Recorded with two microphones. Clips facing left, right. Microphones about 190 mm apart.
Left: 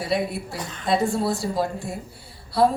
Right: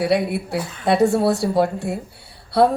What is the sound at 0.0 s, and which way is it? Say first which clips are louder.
A woman's voice: right 6 dB; 65° right (ahead or behind).